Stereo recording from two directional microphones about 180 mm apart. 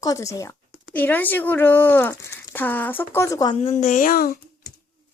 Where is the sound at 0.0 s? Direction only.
20° left (ahead or behind).